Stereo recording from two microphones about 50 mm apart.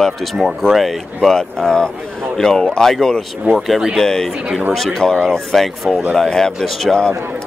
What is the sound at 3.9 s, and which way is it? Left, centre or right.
A man's voice, centre.